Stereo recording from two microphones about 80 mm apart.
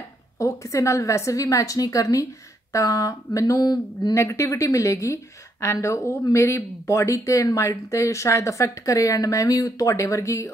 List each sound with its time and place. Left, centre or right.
0.4 s a woman's voice: left
4.1 s a woman's voice: left